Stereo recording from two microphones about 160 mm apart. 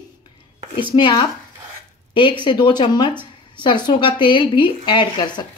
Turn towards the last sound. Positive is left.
turn(degrees=30)  # may be behind; listen again after turning